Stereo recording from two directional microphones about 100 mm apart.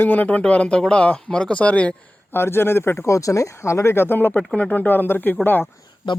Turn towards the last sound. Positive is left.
turn(degrees=55)  # may be behind; listen again after turning